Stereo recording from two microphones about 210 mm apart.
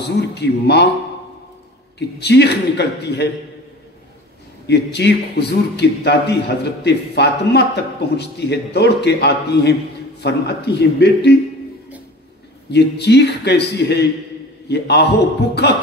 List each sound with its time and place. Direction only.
0.0 s a man's voice: 55° left (ahead or behind)
2.0 s a man's voice: 55° left (ahead or behind)
4.6 s a man's voice: 55° left (ahead or behind)
12.7 s a man's voice: 50° left (ahead or behind)